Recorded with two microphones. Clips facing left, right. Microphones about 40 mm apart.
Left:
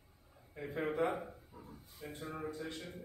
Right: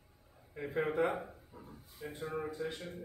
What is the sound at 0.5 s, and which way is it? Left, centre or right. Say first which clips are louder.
Speech: right 3 dB; centre.